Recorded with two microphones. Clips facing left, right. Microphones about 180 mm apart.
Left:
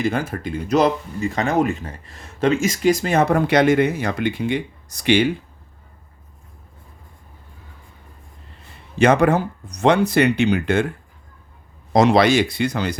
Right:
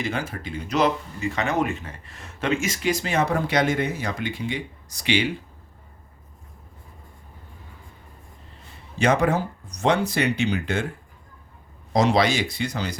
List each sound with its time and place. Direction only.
0.0 s speech: 45° left (ahead or behind)
9.0 s speech: 60° left (ahead or behind)
11.9 s speech: 60° left (ahead or behind)